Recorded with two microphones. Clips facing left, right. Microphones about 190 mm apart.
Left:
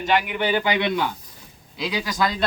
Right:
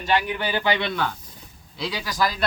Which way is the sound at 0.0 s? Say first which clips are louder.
Left 2 dB; 20° left (ahead or behind).